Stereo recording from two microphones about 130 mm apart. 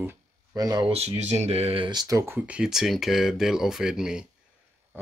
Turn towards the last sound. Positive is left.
turn(degrees=-5)  # may be behind; listen again after turning